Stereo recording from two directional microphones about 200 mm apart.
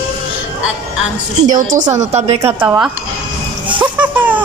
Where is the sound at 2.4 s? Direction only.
10° right (ahead or behind).